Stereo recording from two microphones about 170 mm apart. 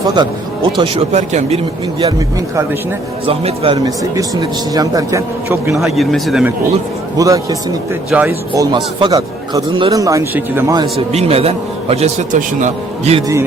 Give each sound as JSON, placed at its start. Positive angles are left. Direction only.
{"t": 0.0, "sound": "a man's voice", "side_deg": -25}
{"t": 1.1, "sound": "speech", "side_deg": -40}
{"t": 3.2, "sound": "speech", "side_deg": -35}
{"t": 3.8, "sound": "a man's voice", "side_deg": -20}
{"t": 5.7, "sound": "a man's voice", "side_deg": 0}
{"t": 7.2, "sound": "a man's voice", "side_deg": -20}
{"t": 8.5, "sound": "a man's voice", "side_deg": -25}
{"t": 10.9, "sound": "speech", "side_deg": -35}